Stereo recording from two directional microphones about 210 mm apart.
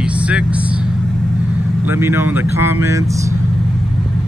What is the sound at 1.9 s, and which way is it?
Speech, 10° right (ahead or behind).